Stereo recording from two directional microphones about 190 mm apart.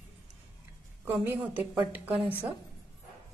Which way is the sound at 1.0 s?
10° right (ahead or behind).